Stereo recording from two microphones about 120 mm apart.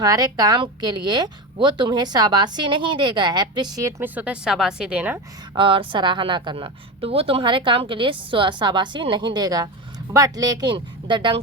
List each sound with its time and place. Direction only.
0.0 s a woman's voice: 30° right (ahead or behind)
4.0 s a woman's voice: 15° right (ahead or behind)
5.5 s a woman's voice: 45° right (ahead or behind)